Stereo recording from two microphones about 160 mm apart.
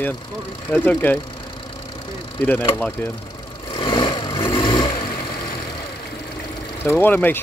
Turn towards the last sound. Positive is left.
turn(degrees=10)  # may be behind; listen again after turning